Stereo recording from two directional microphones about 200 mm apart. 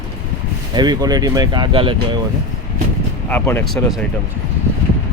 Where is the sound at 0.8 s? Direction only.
20° right (ahead or behind).